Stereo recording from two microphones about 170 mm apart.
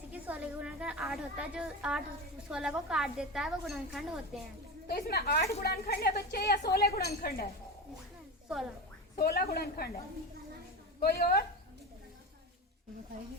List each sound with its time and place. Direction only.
0.1 s a woman's voice: 10° right (ahead or behind)
4.9 s a woman's voice: 65° left (ahead or behind)
9.1 s a woman's voice: 60° left (ahead or behind)
11.0 s a woman's voice: 65° left (ahead or behind)